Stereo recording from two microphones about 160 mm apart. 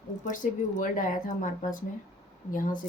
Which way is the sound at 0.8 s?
55° left (ahead or behind).